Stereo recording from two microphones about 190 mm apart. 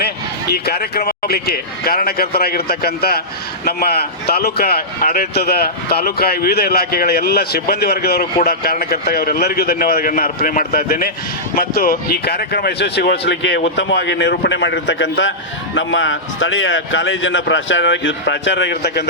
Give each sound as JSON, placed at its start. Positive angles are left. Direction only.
{"t": 0.5, "sound": "speech", "side_deg": 55}
{"t": 15.7, "sound": "speech", "side_deg": 80}